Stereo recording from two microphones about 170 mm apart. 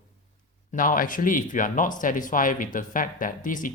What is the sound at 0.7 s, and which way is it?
Speech, 55° left (ahead or behind).